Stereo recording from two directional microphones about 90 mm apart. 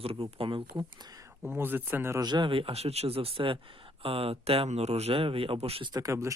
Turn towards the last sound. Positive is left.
turn(degrees=-35)  # may be behind; listen again after turning